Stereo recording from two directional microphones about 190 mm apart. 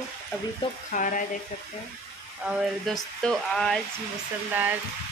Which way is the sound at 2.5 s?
Centre (ahead or behind).